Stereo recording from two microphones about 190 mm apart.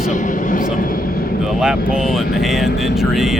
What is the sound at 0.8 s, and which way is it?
Vehicle, 50° left (ahead or behind).